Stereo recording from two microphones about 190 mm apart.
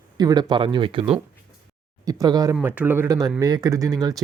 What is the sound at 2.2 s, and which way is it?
Speech, 20° right (ahead or behind).